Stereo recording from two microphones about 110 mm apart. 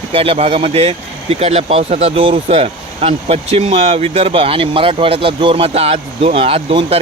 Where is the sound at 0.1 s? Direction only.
55° right (ahead or behind).